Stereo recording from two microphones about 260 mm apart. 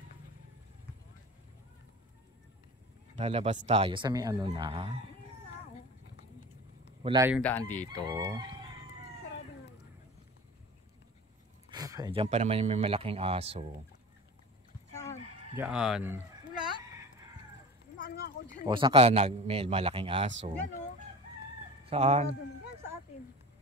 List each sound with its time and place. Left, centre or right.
3.2 s speech: right
7.0 s speech: centre
7.4 s speech: centre
7.9 s speech: centre
11.7 s speech: centre
15.5 s a sound: centre
17.9 s a sound: left
18.6 s speech: centre
21.8 s speech: right